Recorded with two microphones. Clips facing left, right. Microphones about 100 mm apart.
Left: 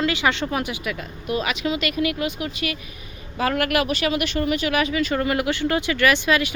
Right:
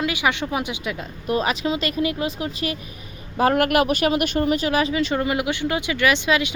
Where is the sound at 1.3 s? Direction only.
35° right (ahead or behind).